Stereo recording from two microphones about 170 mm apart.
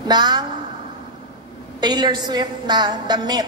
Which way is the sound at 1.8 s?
25° right (ahead or behind).